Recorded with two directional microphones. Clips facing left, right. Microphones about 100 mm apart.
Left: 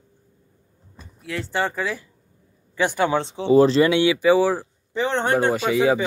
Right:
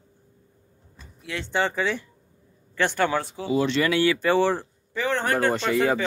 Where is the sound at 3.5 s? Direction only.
35° left (ahead or behind); by 4.6 s 5° left (ahead or behind).